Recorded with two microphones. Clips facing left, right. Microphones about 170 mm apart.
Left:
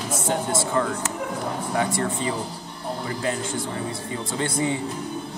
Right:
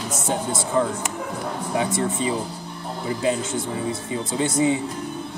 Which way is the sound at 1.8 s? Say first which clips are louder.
Right 2 dB; 20° right (ahead or behind).